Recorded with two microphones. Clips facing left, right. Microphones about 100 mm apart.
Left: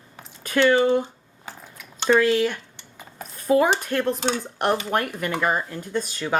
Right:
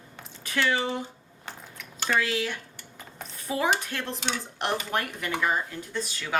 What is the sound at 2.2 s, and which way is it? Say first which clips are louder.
Speech: left 9 dB; 50° left (ahead or behind).